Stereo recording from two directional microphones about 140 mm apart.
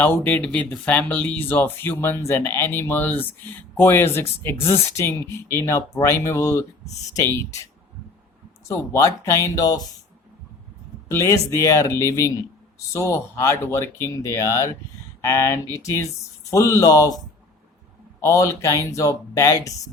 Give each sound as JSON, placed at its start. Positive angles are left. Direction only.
{"t": 0.0, "sound": "speech", "side_deg": 10}
{"t": 8.6, "sound": "speech", "side_deg": 20}
{"t": 11.1, "sound": "speech", "side_deg": 20}
{"t": 18.2, "sound": "speech", "side_deg": 20}